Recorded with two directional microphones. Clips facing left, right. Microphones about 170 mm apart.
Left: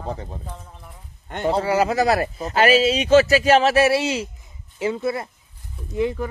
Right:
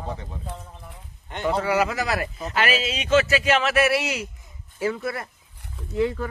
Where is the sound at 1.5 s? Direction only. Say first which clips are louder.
Left 3 dB; 30° left (ahead or behind).